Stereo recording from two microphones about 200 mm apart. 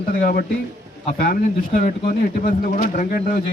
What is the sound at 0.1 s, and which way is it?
A man's voice, 45° left (ahead or behind).